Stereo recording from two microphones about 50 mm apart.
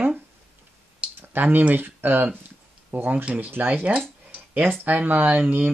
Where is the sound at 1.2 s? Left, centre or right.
Right.